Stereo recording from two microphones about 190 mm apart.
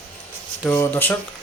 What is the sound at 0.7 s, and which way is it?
Speech, 10° left (ahead or behind).